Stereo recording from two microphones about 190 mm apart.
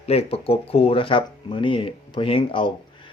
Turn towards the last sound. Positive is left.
turn(degrees=25)  # may be behind; listen again after turning